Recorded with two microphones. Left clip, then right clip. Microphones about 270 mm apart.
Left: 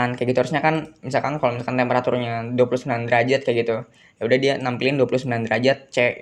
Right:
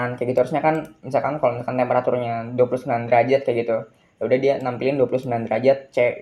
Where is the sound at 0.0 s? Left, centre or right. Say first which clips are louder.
Even; left.